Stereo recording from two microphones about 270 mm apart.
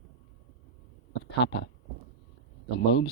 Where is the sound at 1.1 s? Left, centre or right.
Left.